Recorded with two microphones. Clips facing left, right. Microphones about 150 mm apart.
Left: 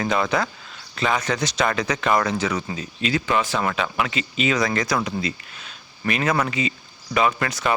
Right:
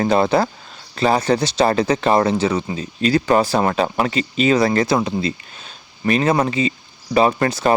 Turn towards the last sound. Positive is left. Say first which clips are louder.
# right 5 dB
turn(degrees=-30)  # may be behind; listen again after turning